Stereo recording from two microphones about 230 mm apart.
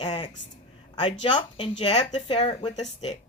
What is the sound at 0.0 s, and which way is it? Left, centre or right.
A woman's voice, left.